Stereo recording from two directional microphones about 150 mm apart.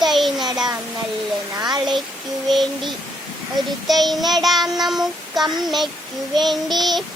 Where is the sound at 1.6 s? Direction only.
30° right (ahead or behind).